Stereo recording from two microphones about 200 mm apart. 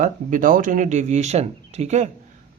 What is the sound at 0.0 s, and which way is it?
Speech, 40° right (ahead or behind).